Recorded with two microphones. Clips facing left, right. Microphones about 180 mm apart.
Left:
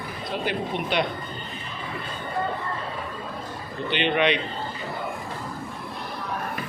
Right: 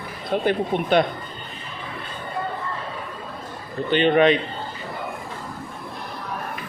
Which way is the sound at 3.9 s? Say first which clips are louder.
Right 6 dB; 40° right (ahead or behind).